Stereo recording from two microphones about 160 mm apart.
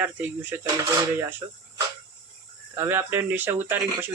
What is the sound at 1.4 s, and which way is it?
Speech, 25° right (ahead or behind).